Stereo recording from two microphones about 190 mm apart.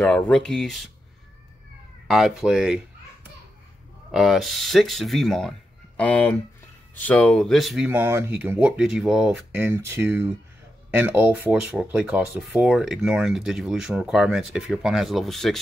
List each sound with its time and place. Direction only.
0.0 s speech: 5° left (ahead or behind)
2.0 s speech: centre (ahead or behind)
4.1 s speech: centre (ahead or behind)